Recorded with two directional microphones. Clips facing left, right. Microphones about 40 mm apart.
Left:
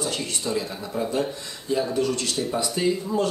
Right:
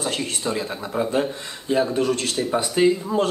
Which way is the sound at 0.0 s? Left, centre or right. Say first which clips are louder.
Right 3 dB; right.